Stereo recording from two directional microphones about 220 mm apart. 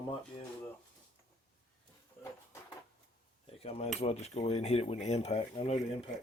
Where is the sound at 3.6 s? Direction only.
30° left (ahead or behind).